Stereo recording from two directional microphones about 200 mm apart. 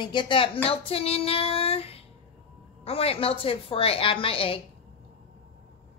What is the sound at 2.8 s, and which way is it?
A woman's voice, 30° left (ahead or behind).